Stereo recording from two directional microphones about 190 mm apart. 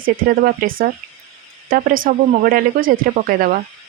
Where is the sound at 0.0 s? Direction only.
50° right (ahead or behind).